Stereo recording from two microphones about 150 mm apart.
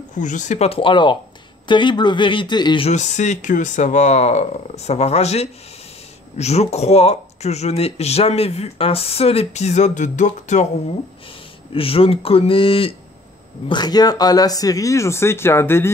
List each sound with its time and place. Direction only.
0.1 s speech: 55° left (ahead or behind); by 2.9 s 30° left (ahead or behind)
2.9 s speech: 50° left (ahead or behind)
11.7 s speech: 40° left (ahead or behind)
13.7 s speech: 30° left (ahead or behind)